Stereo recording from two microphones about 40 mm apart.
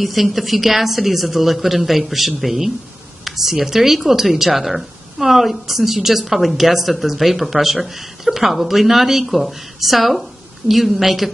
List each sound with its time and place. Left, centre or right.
0.0 s speech: centre